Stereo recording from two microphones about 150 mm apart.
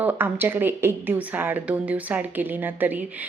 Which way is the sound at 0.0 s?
15° right (ahead or behind).